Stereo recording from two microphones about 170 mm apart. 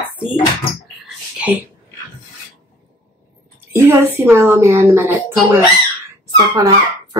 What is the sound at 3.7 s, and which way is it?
A woman's voice, 15° right (ahead or behind).